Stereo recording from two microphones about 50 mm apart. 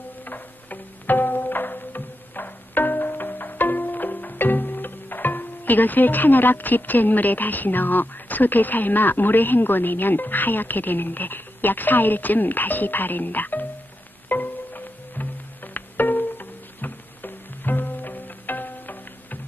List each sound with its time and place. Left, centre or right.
0.2 s music: left